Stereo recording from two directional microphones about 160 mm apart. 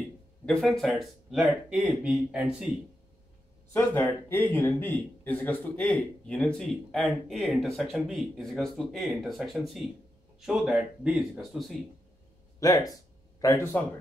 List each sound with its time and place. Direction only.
0.5 s speech: centre (ahead or behind)
3.7 s speech: 15° left (ahead or behind)
12.5 s speech: 20° left (ahead or behind)